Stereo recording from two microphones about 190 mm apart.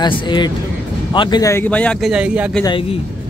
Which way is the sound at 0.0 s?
25° left (ahead or behind).